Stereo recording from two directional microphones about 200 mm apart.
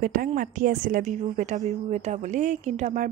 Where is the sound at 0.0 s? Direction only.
40° right (ahead or behind).